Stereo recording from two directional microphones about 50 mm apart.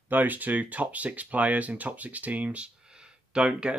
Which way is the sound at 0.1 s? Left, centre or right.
Right.